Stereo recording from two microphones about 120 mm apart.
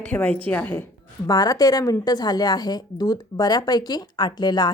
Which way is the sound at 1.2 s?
30° left (ahead or behind).